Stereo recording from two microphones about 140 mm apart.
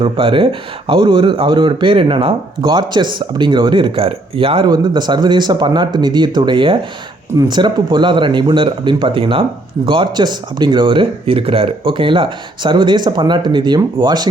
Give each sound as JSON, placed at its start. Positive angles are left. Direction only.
{"t": 0.0, "sound": "speech", "side_deg": -40}